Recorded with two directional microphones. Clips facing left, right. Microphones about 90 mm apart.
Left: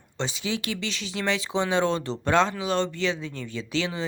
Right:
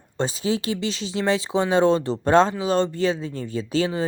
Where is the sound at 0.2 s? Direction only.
40° right (ahead or behind).